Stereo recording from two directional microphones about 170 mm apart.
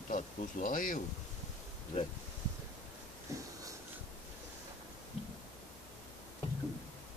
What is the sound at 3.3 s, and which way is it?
Wheeze, 15° right (ahead or behind).